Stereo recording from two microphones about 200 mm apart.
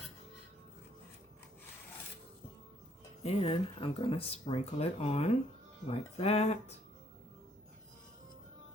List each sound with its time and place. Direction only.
3.2 s speech: 30° left (ahead or behind)